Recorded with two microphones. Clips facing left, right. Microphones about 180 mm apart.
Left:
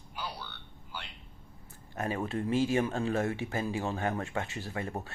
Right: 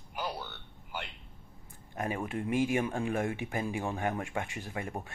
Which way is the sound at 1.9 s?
15° right (ahead or behind).